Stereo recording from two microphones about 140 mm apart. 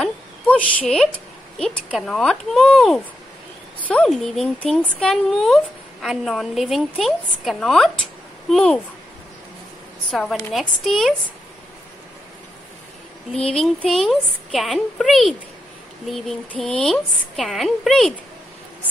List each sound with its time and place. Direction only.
0.0 s a sound: 10° left (ahead or behind)
1.9 s speech: centre (ahead or behind)
10.8 s speech: centre (ahead or behind)
13.3 s speech: 5° left (ahead or behind)